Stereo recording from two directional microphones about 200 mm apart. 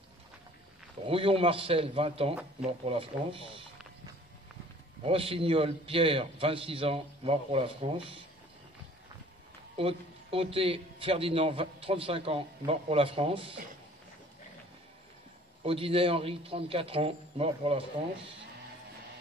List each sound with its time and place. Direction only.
1.0 s a man's voice: 30° right (ahead or behind)
5.0 s a man's voice: 30° right (ahead or behind)
9.8 s a man's voice: 30° right (ahead or behind)
15.6 s a man's voice: 30° right (ahead or behind)